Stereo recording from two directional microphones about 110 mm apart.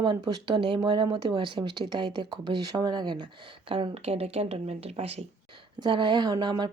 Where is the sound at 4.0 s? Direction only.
70° right (ahead or behind).